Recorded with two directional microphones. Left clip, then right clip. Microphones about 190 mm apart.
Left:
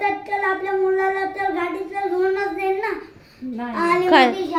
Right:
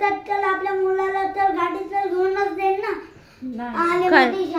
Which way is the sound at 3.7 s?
10° left (ahead or behind).